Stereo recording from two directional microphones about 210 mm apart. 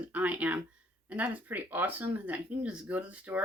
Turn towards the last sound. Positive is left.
turn(degrees=-5)  # may be behind; listen again after turning